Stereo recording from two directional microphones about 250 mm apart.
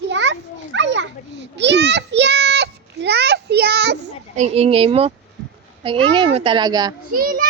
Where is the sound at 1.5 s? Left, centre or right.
Right.